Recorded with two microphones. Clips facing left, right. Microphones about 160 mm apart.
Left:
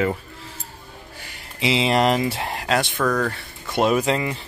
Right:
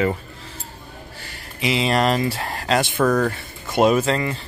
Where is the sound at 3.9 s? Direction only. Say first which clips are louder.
Right 1 dB; 15° left (ahead or behind).